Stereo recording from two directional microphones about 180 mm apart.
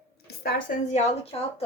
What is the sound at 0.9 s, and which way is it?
Speech, 35° left (ahead or behind).